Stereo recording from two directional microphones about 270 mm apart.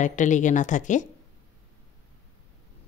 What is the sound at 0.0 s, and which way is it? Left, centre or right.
A woman's voice, left.